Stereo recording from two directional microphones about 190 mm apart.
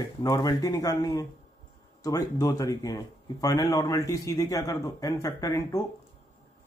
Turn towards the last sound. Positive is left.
turn(degrees=15)  # may be behind; listen again after turning